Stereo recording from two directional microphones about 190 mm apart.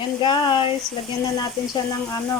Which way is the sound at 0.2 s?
25° left (ahead or behind).